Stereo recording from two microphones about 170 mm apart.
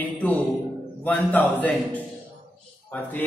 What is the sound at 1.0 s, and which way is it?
A man's voice, 10° left (ahead or behind).